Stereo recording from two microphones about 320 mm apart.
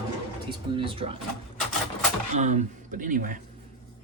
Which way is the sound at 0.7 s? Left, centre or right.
Centre.